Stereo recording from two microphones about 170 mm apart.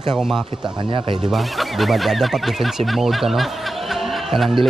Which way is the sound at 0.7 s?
30° right (ahead or behind).